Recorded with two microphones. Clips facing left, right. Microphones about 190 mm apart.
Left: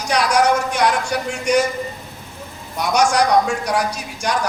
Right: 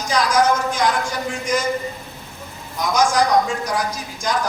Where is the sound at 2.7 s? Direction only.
70° left (ahead or behind).